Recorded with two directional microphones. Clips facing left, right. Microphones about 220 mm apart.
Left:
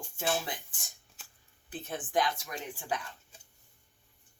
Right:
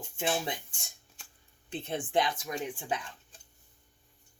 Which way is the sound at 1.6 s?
25° right (ahead or behind).